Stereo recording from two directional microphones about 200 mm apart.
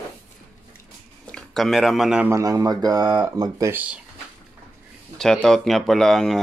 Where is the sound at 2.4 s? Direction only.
15° right (ahead or behind).